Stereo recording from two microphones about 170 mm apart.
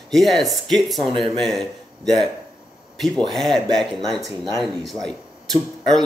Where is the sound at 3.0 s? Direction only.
Centre (ahead or behind).